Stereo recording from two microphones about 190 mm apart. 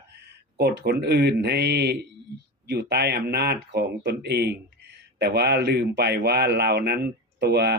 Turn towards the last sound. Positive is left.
turn(degrees=-60)  # may be behind; listen again after turning